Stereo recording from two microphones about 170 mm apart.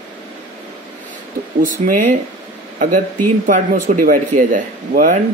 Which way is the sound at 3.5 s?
55° right (ahead or behind).